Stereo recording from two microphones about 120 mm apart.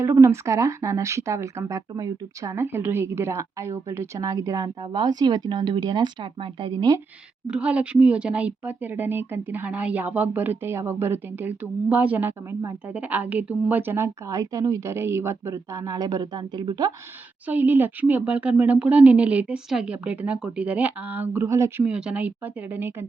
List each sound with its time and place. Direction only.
0.0 s speech: 25° right (ahead or behind); by 6.9 s 45° right (ahead or behind)
7.4 s speech: 10° right (ahead or behind); by 16.9 s 35° right (ahead or behind)
17.4 s speech: 15° right (ahead or behind)
21.8 s speech: 10° right (ahead or behind)